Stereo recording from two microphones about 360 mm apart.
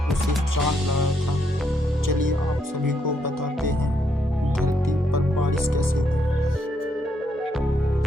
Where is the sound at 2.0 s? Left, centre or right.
Right.